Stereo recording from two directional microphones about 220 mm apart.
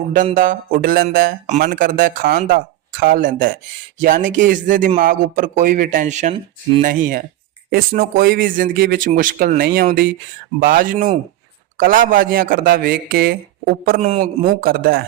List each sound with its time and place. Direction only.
0.1 s speech: 35° right (ahead or behind)
6.8 s speech: 40° right (ahead or behind)